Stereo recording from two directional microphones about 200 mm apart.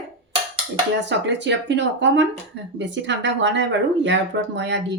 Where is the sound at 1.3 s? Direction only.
60° right (ahead or behind).